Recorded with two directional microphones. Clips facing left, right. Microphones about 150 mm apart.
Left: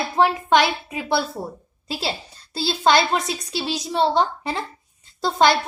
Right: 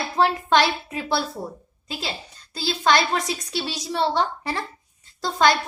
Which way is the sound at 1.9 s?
35° left (ahead or behind).